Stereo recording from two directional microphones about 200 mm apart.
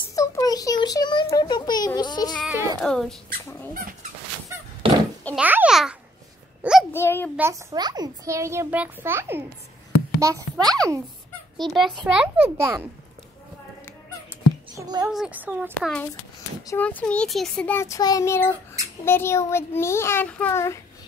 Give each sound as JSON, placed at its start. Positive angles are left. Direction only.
{"t": 0.1, "sound": "a child's voice", "side_deg": 15}
{"t": 2.8, "sound": "a child's voice", "side_deg": 5}
{"t": 4.8, "sound": "a sound", "side_deg": -25}
{"t": 5.4, "sound": "a child's voice", "side_deg": -5}
{"t": 6.6, "sound": "a sound", "side_deg": -5}
{"t": 6.9, "sound": "a child's voice", "side_deg": 10}
{"t": 7.3, "sound": "a child's voice", "side_deg": -15}
{"t": 11.6, "sound": "a child's voice", "side_deg": 0}
{"t": 14.8, "sound": "a child's voice", "side_deg": -20}
{"t": 15.0, "sound": "a child's voice", "side_deg": -5}
{"t": 15.7, "sound": "a child's voice", "side_deg": 5}